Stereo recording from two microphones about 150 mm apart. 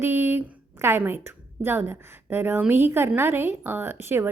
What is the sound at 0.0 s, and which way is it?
A woman's voice, 15° right (ahead or behind).